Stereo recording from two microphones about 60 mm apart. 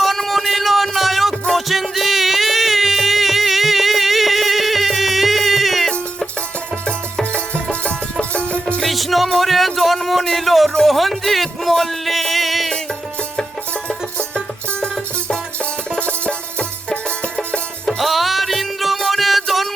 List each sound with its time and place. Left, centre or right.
0.0 s music: centre
6.8 s music: centre
8.8 s music: centre
16.0 s music: left
17.8 s music: centre